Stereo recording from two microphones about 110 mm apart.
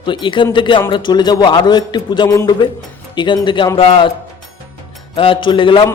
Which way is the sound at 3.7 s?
55° left (ahead or behind).